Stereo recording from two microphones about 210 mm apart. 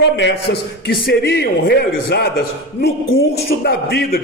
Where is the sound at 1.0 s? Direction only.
50° left (ahead or behind).